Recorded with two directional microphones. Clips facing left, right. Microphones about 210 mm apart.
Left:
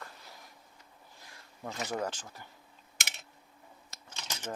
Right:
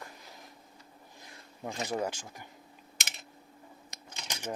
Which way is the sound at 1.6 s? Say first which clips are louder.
Right 2 dB; 15° right (ahead or behind).